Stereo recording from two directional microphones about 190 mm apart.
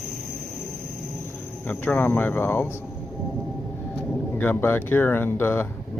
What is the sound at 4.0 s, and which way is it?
Speech, 10° left (ahead or behind).